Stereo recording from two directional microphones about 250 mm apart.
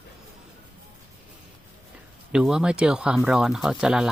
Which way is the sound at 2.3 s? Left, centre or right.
Centre.